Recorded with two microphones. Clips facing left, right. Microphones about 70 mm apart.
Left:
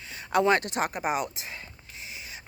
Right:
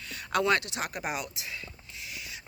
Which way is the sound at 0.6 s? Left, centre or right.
Left.